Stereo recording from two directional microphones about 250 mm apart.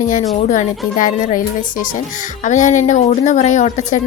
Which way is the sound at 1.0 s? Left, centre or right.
Left.